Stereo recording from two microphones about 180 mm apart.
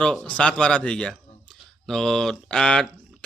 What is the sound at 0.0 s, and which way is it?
Speech, 5° left (ahead or behind).